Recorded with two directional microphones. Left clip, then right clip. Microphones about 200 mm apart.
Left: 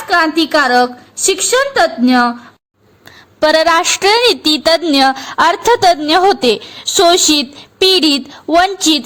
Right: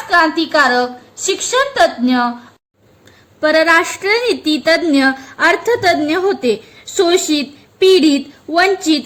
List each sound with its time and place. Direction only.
0.1 s a woman's voice: 35° left (ahead or behind)
3.4 s a woman's voice: 45° left (ahead or behind)